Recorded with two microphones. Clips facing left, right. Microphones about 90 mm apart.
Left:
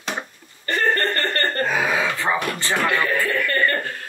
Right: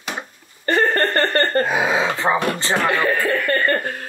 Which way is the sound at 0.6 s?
30° right (ahead or behind).